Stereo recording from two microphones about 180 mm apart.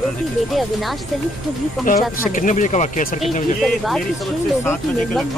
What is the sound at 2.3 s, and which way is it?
Speech, 45° left (ahead or behind).